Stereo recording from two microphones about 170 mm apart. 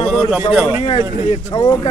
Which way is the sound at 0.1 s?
5° right (ahead or behind).